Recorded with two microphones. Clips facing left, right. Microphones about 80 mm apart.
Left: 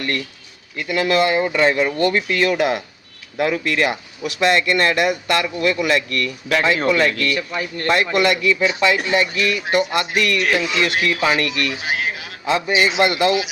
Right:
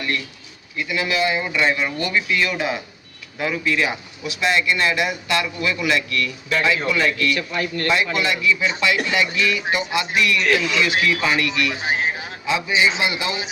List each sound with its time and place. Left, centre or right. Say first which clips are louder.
0.8 s speech: left 4 dB; left
7.3 s speech: even; centre
7.9 s speech: left 5 dB; left
8.8 s speech: left 3 dB; left
11.8 s a sound: right 1 dB; right
12.5 s speech: left 2 dB; left